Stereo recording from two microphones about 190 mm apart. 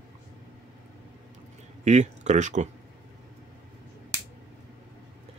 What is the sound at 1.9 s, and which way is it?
Speech, 35° right (ahead or behind).